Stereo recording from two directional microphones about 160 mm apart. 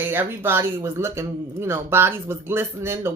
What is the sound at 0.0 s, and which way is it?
Speech, 15° right (ahead or behind).